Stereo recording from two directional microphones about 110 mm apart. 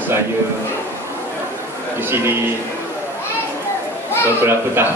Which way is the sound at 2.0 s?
20° right (ahead or behind).